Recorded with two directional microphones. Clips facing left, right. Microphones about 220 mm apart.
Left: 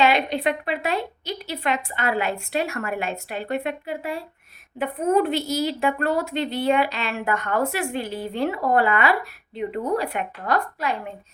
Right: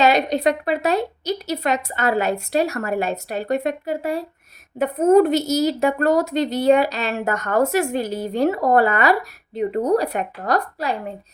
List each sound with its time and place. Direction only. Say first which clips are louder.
0.0 s a woman's voice: right 3 dB; 40° right (ahead or behind)